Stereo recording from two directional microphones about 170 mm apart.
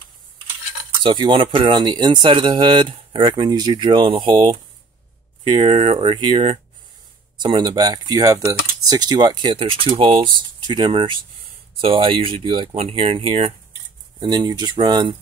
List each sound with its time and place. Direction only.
1.0 s speech: 30° right (ahead or behind)
14.2 s speech: 25° right (ahead or behind)